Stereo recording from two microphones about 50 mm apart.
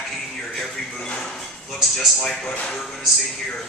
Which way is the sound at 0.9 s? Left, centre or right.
Left.